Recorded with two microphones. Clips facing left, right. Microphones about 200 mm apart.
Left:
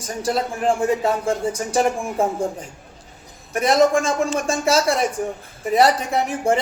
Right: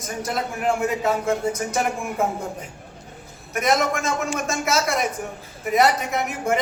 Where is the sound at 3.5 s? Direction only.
30° left (ahead or behind).